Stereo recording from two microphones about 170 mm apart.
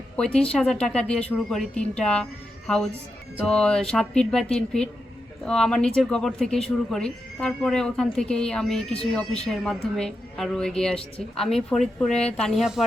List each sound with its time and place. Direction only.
0.2 s a woman's voice: 5° left (ahead or behind)